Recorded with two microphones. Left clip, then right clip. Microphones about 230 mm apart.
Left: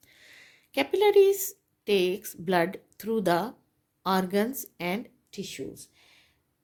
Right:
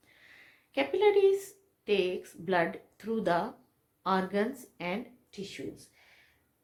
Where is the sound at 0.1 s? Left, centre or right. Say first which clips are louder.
Left 3 dB; left.